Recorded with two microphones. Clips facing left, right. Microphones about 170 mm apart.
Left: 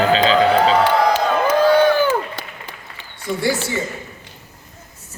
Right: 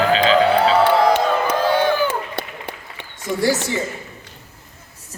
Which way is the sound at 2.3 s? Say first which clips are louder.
Right 4 dB; 65° right (ahead or behind).